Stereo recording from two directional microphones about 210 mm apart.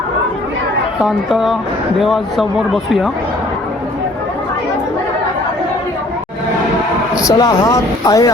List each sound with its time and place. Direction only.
1.0 s speech: centre (ahead or behind)
7.2 s speech: 15° left (ahead or behind)